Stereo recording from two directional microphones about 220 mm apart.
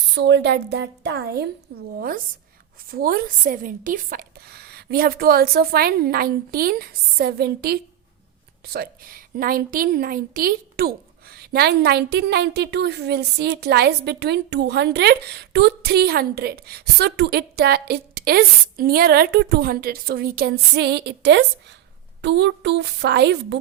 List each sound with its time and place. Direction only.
0.1 s a woman's voice: 50° right (ahead or behind)